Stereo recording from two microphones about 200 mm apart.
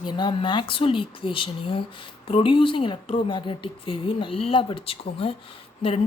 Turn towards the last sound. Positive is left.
turn(degrees=30)  # may be behind; listen again after turning